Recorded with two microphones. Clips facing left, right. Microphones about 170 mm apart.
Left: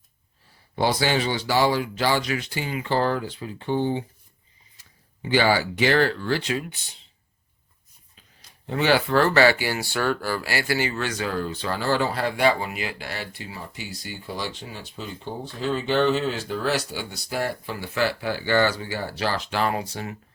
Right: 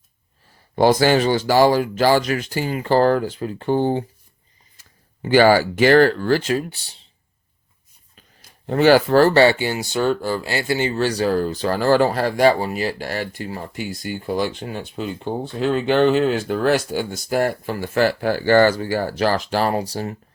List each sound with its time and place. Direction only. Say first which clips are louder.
0.8 s speech: right 8 dB; 45° right (ahead or behind)
8.6 s speech: right 8 dB; 45° right (ahead or behind)